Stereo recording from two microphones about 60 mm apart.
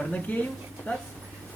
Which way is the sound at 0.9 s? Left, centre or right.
Left.